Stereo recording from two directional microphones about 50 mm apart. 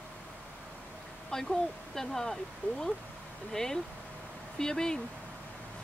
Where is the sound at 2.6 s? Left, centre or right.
Left.